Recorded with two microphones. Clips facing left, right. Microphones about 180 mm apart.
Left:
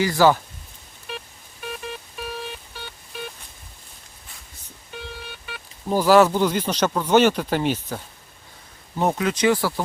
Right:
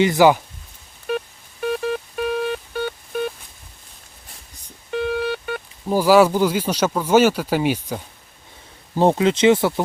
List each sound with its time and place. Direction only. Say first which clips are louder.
0.0 s speech: right 3 dB; 20° right (ahead or behind)
1.6 s music: right 11 dB; 55° right (ahead or behind)
4.9 s a sound: right 15 dB; 65° right (ahead or behind)
5.9 s speech: right 2 dB; 10° right (ahead or behind)
9.0 s speech: right 6 dB; 25° right (ahead or behind)